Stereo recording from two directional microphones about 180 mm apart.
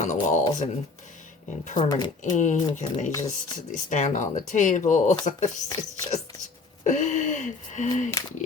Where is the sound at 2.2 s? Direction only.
45° left (ahead or behind).